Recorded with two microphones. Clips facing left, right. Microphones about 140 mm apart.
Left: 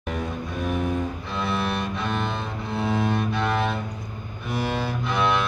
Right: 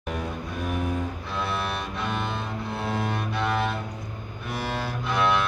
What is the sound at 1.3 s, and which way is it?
Cello, 5° right (ahead or behind).